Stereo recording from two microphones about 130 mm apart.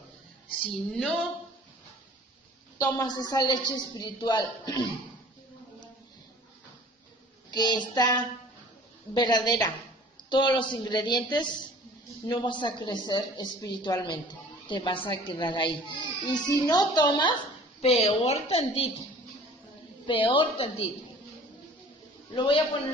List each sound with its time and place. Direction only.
0.6 s a sound: 5° left (ahead or behind)
2.7 s a woman's voice: 30° left (ahead or behind)
7.5 s a woman's voice: 35° left (ahead or behind)
17.7 s a woman's voice: 50° left (ahead or behind)
20.1 s a woman's voice: 40° left (ahead or behind)
22.4 s a woman's voice: 40° left (ahead or behind)